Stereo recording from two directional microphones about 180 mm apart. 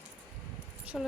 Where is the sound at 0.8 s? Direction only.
5° right (ahead or behind).